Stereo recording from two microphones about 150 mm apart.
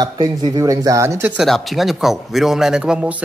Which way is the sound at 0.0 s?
30° right (ahead or behind).